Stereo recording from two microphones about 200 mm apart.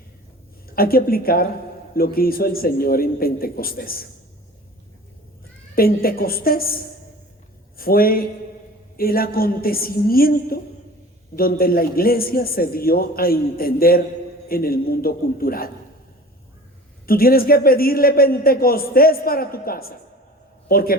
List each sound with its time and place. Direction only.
0.8 s a man's voice: 50° left (ahead or behind)
5.7 s a man's voice: 45° left (ahead or behind)
7.8 s a man's voice: 45° left (ahead or behind)
17.1 s a man's voice: 45° left (ahead or behind)